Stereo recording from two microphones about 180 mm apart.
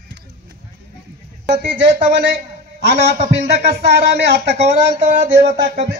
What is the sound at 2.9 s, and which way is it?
Speech, 40° right (ahead or behind).